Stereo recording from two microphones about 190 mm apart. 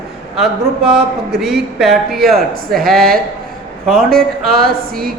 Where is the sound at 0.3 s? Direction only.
Centre (ahead or behind).